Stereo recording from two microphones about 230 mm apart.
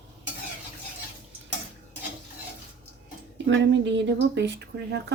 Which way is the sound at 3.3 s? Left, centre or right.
Right.